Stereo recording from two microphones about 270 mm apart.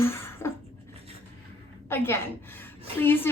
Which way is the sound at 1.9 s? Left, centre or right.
Centre.